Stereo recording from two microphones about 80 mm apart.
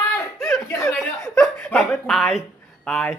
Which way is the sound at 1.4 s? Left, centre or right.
Centre.